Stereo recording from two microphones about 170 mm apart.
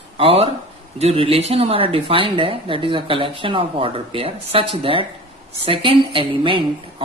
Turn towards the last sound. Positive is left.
turn(degrees=-30)  # may be behind; listen again after turning